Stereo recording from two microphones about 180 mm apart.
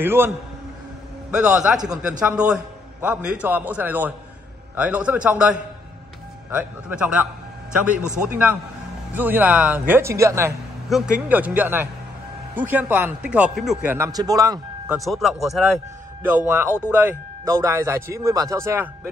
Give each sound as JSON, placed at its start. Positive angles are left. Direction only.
{"t": 0.0, "sound": "a man's voice", "side_deg": -10}
{"t": 1.3, "sound": "a man's voice", "side_deg": -5}
{"t": 8.3, "sound": "a man's voice", "side_deg": -10}
{"t": 10.9, "sound": "a man's voice", "side_deg": -5}
{"t": 13.9, "sound": "speech", "side_deg": -20}
{"t": 15.0, "sound": "a man's voice", "side_deg": 0}
{"t": 16.3, "sound": "a man's voice", "side_deg": -10}